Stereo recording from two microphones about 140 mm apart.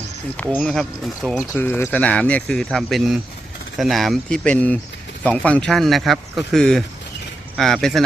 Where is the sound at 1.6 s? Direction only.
15° left (ahead or behind).